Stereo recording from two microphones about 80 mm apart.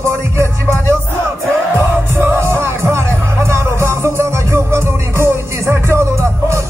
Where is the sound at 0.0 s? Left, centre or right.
Right.